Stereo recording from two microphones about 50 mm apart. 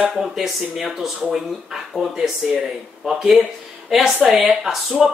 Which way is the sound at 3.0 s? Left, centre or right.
Centre.